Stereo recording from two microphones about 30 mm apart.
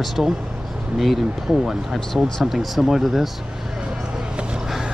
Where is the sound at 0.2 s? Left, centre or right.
Centre.